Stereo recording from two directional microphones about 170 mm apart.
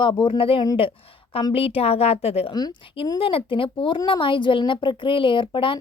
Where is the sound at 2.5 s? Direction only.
20° left (ahead or behind).